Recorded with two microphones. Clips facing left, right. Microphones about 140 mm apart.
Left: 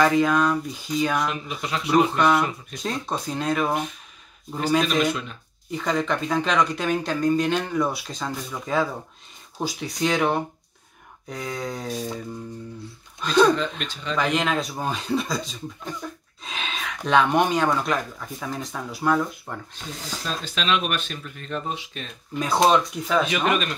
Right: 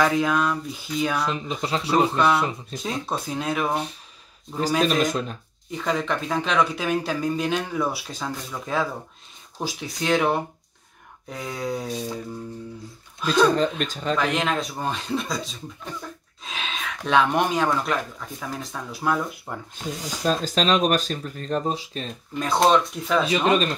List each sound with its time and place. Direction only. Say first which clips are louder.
0.0 s speech: left 2 dB; centre (ahead or behind)
1.2 s speech: right 1 dB; 30° right (ahead or behind)
2.1 s speech: left 1 dB; centre (ahead or behind)
5.0 s speech: right 1 dB; 40° right (ahead or behind)
5.7 s speech: left 1 dB; centre (ahead or behind)
11.2 s a sound: right 1 dB; 5° right (ahead or behind)
13.2 s speech: left 1 dB; 5° right (ahead or behind)
13.6 s speech: right 5 dB; 40° right (ahead or behind)
14.1 s speech: left 1 dB; centre (ahead or behind)
20.2 s speech: right 5 dB; 40° right (ahead or behind)
22.4 s speech: even; centre (ahead or behind)
23.2 s speech: right 3 dB; 30° right (ahead or behind)